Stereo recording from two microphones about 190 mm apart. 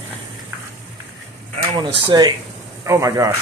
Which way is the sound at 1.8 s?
20° right (ahead or behind).